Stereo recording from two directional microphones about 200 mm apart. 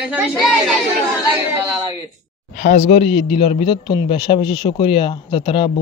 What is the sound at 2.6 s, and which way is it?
A man's voice, 35° left (ahead or behind).